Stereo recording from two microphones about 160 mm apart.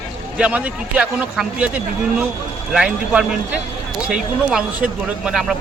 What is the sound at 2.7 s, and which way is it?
Speech, 5° right (ahead or behind).